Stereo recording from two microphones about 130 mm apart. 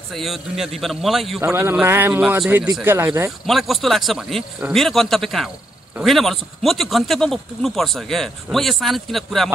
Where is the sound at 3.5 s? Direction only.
Centre (ahead or behind).